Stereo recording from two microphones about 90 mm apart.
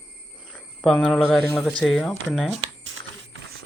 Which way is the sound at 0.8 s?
Centre (ahead or behind).